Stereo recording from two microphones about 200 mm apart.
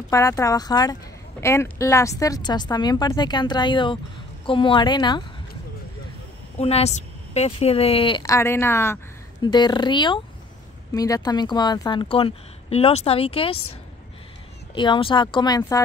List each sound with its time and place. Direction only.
0.1 s speech: 15° left (ahead or behind)
6.6 s speech: 30° left (ahead or behind)
14.7 s speech: 25° left (ahead or behind)